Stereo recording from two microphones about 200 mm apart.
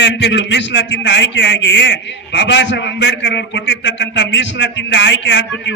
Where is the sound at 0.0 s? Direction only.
60° left (ahead or behind).